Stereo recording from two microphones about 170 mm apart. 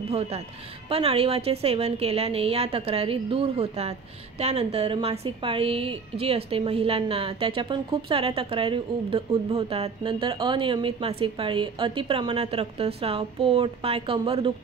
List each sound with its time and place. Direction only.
0.1 s a woman's voice: 35° right (ahead or behind)